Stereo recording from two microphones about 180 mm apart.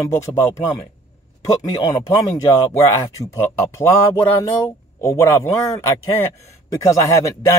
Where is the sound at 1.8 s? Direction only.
25° left (ahead or behind).